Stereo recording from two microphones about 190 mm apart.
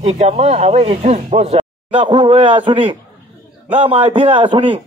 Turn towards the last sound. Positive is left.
turn(degrees=-25)  # may be behind; listen again after turning